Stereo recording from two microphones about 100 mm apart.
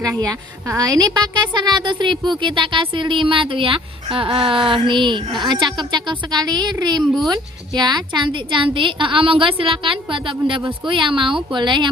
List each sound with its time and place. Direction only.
0.8 s a woman's voice: 40° right (ahead or behind)